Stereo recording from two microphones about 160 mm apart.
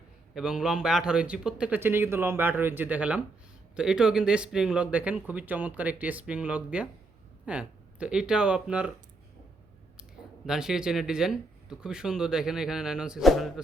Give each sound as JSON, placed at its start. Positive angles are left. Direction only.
{"t": 0.3, "sound": "speech", "side_deg": -5}
{"t": 10.0, "sound": "speech", "side_deg": -5}